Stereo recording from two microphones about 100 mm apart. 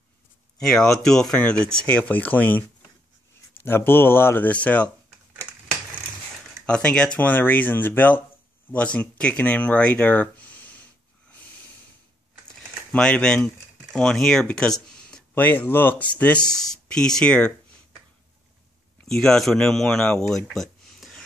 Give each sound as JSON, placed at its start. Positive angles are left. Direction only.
{"t": 0.6, "sound": "speech", "side_deg": 5}
{"t": 6.6, "sound": "speech", "side_deg": 10}
{"t": 12.9, "sound": "speech", "side_deg": 10}
{"t": 16.4, "sound": "speech", "side_deg": 40}
{"t": 16.7, "sound": "speech", "side_deg": 5}
{"t": 19.0, "sound": "speech", "side_deg": 5}